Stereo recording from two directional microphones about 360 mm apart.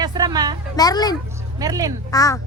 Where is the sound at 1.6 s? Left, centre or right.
Centre.